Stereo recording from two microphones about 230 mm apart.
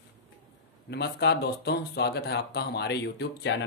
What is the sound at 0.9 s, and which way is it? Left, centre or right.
Speech, left.